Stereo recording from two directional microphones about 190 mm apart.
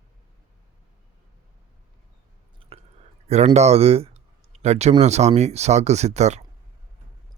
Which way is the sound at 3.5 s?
35° right (ahead or behind).